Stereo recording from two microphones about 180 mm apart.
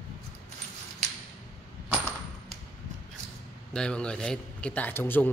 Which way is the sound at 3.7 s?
5° left (ahead or behind).